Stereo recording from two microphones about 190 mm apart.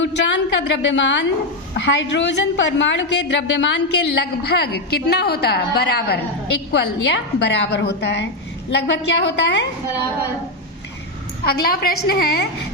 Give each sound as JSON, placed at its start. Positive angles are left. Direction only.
{"t": 0.0, "sound": "a woman's voice", "side_deg": 70}
{"t": 11.4, "sound": "a woman's voice", "side_deg": 55}